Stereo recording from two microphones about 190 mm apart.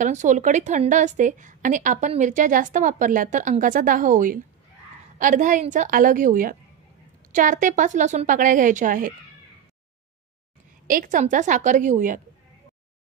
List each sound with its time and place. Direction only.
0.0 s a woman's voice: 40° right (ahead or behind)
10.9 s speech: 45° right (ahead or behind)